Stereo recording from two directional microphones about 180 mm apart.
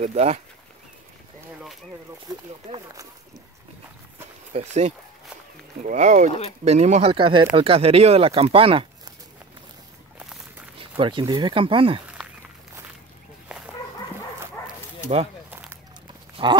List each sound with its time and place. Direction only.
0.0 s speech: 35° right (ahead or behind)
2.2 s speech: 20° right (ahead or behind)
4.6 s speech: 40° right (ahead or behind)
10.8 s speech: 30° right (ahead or behind)
13.5 s dog: 5° right (ahead or behind)
15.5 s run: 10° right (ahead or behind)
16.4 s livestock: 30° right (ahead or behind)